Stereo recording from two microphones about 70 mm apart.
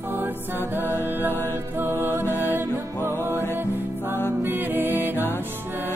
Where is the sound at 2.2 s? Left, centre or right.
Left.